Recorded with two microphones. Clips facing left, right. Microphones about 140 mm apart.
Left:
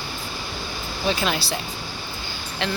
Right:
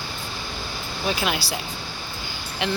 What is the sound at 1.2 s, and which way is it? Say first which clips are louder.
Speech: left 1 dB; 10° right (ahead or behind).